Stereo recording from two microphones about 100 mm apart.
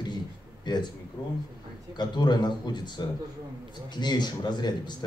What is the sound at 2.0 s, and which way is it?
Speech, 45° left (ahead or behind).